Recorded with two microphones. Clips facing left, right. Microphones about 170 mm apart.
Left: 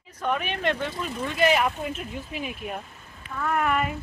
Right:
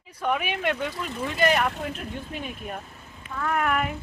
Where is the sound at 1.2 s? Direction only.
Centre (ahead or behind).